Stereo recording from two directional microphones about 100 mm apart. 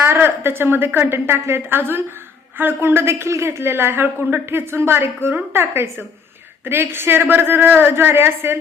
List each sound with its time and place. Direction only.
0.0 s a woman's voice: 20° right (ahead or behind)